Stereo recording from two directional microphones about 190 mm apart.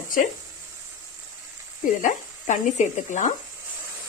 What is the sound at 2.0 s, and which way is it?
Speech, 40° left (ahead or behind).